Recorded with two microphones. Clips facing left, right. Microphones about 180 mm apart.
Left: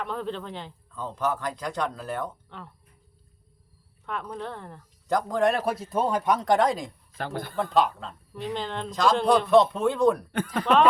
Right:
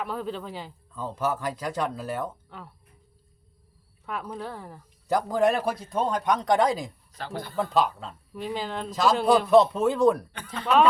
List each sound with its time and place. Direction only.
0.0 s speech: 5° right (ahead or behind)
4.0 s speech: 5° right (ahead or behind)
7.1 s speech: 55° left (ahead or behind)
7.5 s speech: centre (ahead or behind)
10.3 s speech: 55° left (ahead or behind)